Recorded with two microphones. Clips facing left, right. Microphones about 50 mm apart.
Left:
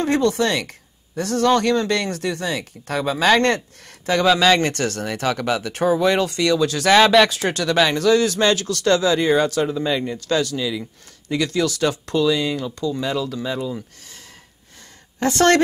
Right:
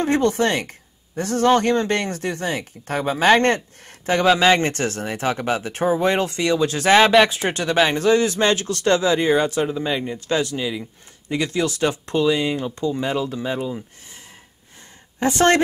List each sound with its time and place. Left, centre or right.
0.0 s speech: right
15.1 s speech: right